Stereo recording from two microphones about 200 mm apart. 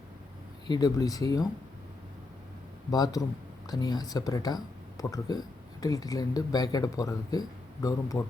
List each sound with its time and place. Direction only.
0.7 s speech: 20° left (ahead or behind)
2.9 s speech: 20° left (ahead or behind)